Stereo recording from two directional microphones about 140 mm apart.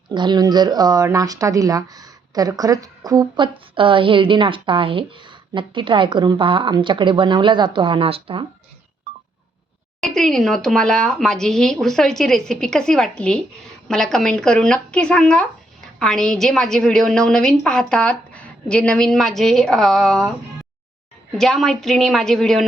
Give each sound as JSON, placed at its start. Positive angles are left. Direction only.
{"t": 0.1, "sound": "speech", "side_deg": -30}
{"t": 10.0, "sound": "a woman's voice", "side_deg": 5}
{"t": 21.3, "sound": "a woman's voice", "side_deg": 0}